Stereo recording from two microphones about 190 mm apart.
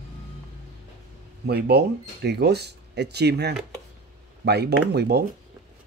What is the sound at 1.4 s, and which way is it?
A man's voice, 60° right (ahead or behind).